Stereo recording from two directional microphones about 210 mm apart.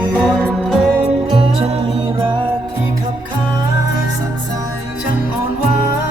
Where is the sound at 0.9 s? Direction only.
25° right (ahead or behind).